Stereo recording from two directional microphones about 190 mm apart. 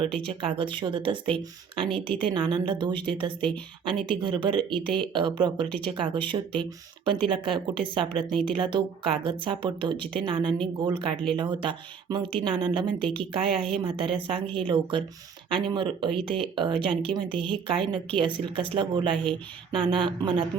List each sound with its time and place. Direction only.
0.0 s speech: 30° right (ahead or behind)
4.7 s speech: 5° left (ahead or behind)
4.9 s speech: 25° right (ahead or behind)